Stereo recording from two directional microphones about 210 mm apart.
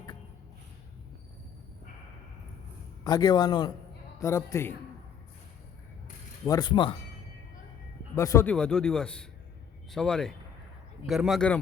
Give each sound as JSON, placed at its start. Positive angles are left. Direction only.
{"t": 3.0, "sound": "a man's voice", "side_deg": 20}
{"t": 6.4, "sound": "a man's voice", "side_deg": 20}
{"t": 8.1, "sound": "speech", "side_deg": 15}